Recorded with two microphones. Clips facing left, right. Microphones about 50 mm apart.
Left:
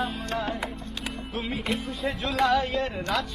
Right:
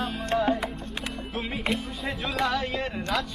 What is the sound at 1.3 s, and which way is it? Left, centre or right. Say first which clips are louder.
Speech: right 1 dB; centre.